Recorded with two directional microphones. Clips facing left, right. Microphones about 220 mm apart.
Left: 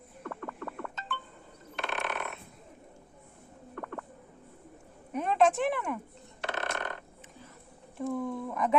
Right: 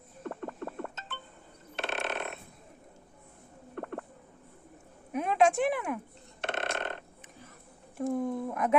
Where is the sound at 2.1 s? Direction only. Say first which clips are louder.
Right 1 dB; 25° right (ahead or behind).